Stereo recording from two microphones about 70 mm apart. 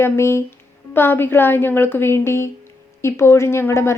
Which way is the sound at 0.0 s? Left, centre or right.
Left.